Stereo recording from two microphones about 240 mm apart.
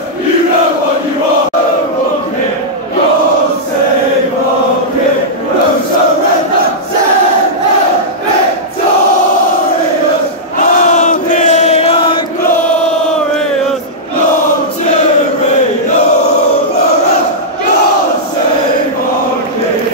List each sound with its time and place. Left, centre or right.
10.6 s chant: left